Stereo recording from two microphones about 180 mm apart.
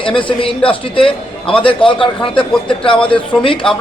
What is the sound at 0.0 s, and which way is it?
A man's voice, 30° left (ahead or behind).